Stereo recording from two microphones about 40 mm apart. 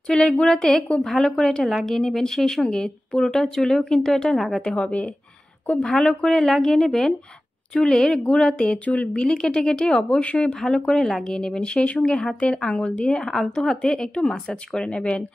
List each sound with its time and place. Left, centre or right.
0.0 s speech: centre
4.6 s speech: centre
8.8 s speech: left
9.2 s speech: left
10.1 s speech: left
10.5 s speech: centre
11.3 s speech: centre
13.2 s speech: centre; by 15.2 s left